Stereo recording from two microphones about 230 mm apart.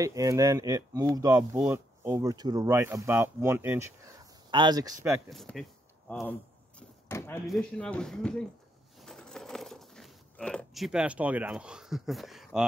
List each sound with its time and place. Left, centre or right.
0.0 s speech: centre
5.3 s speech: centre
6.8 s a sound: centre
7.4 s speech: centre
9.0 s coin: centre